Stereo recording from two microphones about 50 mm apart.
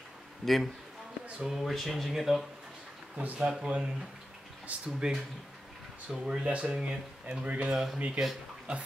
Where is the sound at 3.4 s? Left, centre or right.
Centre.